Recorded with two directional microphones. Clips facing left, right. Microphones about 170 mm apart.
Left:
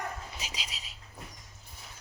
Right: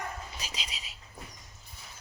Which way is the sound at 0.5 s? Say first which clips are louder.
Right 1 dB; 5° left (ahead or behind).